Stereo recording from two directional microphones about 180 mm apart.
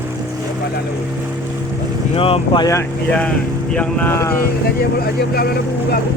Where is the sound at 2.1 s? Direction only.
30° left (ahead or behind).